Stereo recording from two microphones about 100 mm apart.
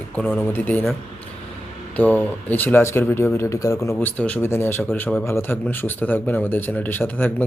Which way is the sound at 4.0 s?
15° left (ahead or behind).